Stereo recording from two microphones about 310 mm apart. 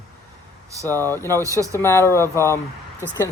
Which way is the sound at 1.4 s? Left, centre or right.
Centre.